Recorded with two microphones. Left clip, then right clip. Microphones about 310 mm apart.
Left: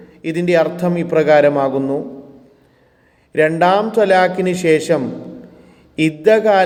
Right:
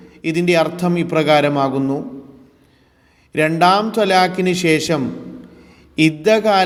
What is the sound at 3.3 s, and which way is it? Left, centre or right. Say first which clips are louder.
A man's voice: left 1 dB; right.